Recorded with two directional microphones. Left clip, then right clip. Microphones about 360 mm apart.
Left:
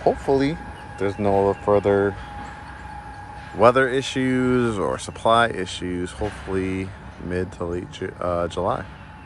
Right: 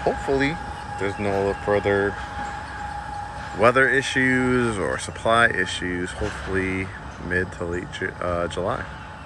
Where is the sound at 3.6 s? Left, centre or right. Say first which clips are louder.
Left 1 dB; centre.